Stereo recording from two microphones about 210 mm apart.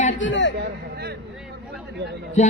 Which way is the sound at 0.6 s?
50° right (ahead or behind).